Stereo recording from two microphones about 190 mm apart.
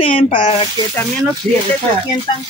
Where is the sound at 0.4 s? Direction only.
30° left (ahead or behind).